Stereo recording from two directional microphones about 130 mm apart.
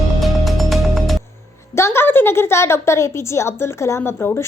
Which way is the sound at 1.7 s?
20° left (ahead or behind).